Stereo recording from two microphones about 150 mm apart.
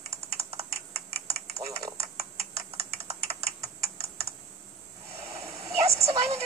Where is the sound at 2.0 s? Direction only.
45° right (ahead or behind).